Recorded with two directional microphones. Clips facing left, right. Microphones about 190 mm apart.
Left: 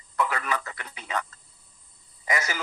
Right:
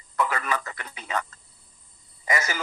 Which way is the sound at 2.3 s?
45° right (ahead or behind).